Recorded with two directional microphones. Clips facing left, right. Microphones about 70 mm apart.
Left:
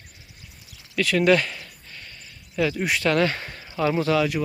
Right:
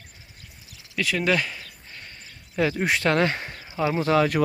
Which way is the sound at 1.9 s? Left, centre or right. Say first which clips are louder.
Even; right.